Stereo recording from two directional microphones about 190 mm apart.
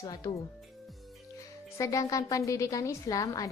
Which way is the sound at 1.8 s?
15° left (ahead or behind).